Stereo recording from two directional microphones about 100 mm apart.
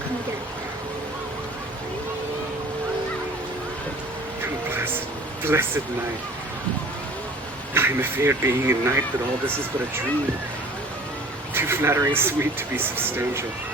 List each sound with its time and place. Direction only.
5.4 s speech: 25° right (ahead or behind)
7.7 s speech: 25° right (ahead or behind)
11.5 s speech: 25° right (ahead or behind)